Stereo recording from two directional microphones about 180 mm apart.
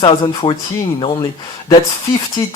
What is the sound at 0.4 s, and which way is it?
Speech, 30° left (ahead or behind).